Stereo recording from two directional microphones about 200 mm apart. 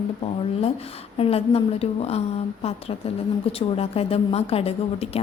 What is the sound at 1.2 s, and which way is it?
A woman's voice, 30° left (ahead or behind).